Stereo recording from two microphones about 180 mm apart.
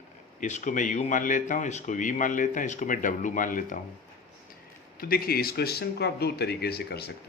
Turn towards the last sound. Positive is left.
turn(degrees=60)  # may be behind; listen again after turning